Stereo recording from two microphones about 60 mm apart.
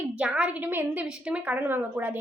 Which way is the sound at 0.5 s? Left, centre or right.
Right.